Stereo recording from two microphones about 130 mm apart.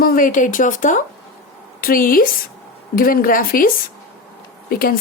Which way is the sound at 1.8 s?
90° left.